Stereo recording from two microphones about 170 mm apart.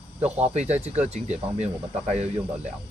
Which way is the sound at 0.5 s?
40° right (ahead or behind).